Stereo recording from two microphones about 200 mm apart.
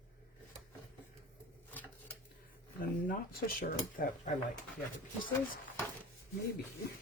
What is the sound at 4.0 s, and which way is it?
Speech, 45° left (ahead or behind).